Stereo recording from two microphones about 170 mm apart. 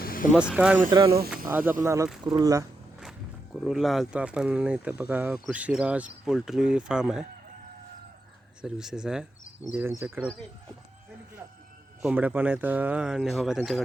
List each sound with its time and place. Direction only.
0.0 s vehicle: 55° left (ahead or behind)
0.5 s speech: 5° right (ahead or behind)
0.9 s speech: 20° right (ahead or behind)
3.0 s speech: centre (ahead or behind)
8.6 s speech: 5° right (ahead or behind)
9.7 s speech: 15° right (ahead or behind)
12.0 s speech: 10° right (ahead or behind)